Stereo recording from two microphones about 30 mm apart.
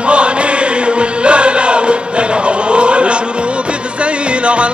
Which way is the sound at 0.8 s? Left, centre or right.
Right.